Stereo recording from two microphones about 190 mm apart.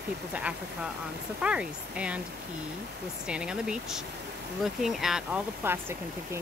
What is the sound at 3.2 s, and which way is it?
Speech, 5° right (ahead or behind).